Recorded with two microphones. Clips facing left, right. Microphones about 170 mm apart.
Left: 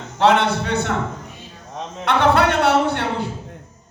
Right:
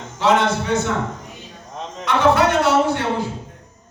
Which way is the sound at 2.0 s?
60° left (ahead or behind).